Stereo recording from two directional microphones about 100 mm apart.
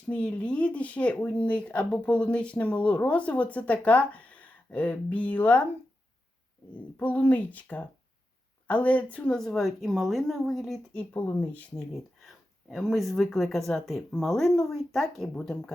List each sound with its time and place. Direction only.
0.1 s speech: 10° left (ahead or behind)
6.7 s speech: 15° left (ahead or behind); by 10.8 s centre (ahead or behind)
11.3 s speech: 10° left (ahead or behind)
12.2 s speech: centre (ahead or behind)